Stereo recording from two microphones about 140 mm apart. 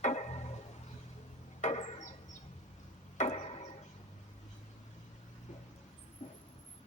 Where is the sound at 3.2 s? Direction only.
55° left (ahead or behind).